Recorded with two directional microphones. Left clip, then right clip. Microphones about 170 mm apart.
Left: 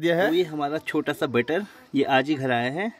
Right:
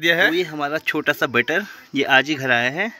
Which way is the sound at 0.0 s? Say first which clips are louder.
Right 5 dB; 20° left (ahead or behind).